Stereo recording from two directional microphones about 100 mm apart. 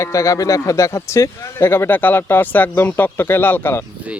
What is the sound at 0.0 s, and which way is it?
Speech, 30° left (ahead or behind).